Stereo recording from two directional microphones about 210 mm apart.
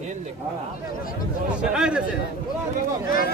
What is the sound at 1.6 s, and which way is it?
Speech, 5° right (ahead or behind).